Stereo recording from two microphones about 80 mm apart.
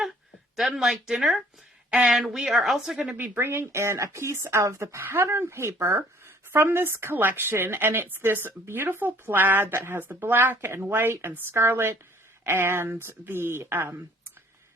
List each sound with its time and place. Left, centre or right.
0.5 s speech: centre
3.2 s speech: right